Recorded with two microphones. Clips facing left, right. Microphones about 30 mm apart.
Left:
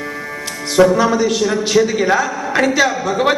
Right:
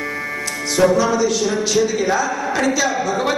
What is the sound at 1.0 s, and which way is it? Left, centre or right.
A man's voice, left.